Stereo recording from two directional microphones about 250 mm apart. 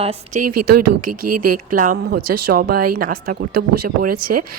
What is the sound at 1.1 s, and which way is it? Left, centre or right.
Speech, right.